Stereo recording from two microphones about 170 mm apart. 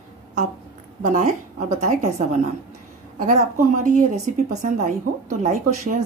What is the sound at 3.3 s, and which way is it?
Speech, 45° right (ahead or behind).